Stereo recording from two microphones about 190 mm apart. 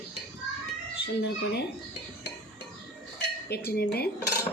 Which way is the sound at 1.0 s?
60° left (ahead or behind).